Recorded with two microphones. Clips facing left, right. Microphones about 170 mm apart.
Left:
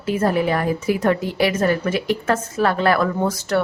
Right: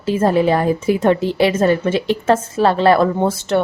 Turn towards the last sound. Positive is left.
turn(degrees=-25)  # may be behind; listen again after turning